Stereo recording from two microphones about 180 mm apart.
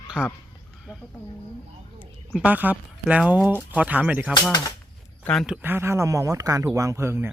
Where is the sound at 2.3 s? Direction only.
10° right (ahead or behind).